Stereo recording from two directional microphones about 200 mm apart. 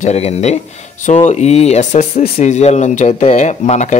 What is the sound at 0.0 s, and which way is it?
Speech, 35° left (ahead or behind).